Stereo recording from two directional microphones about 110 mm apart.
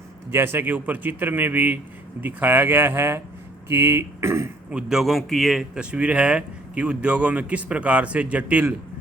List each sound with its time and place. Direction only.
0.3 s a man's voice: 20° right (ahead or behind)
4.7 s a man's voice: 5° right (ahead or behind)